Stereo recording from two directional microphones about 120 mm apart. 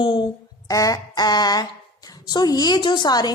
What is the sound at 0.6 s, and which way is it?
A woman's voice, 30° left (ahead or behind).